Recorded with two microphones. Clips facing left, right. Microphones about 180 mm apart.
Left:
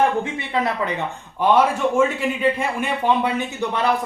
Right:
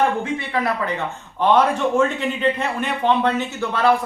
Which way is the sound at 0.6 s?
20° left (ahead or behind).